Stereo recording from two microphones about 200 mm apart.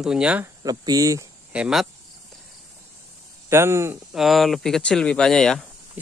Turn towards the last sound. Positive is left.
turn(degrees=5)  # may be behind; listen again after turning